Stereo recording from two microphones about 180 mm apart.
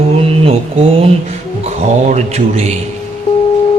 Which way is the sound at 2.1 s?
35° right (ahead or behind).